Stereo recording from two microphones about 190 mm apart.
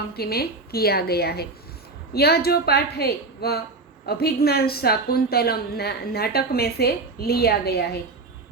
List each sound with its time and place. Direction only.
0.1 s a woman's voice: 55° left (ahead or behind)